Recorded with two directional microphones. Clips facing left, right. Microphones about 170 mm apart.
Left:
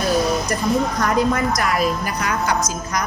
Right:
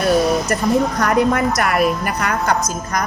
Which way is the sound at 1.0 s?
65° right (ahead or behind).